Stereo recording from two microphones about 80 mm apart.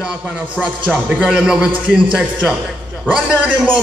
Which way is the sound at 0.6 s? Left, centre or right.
Centre.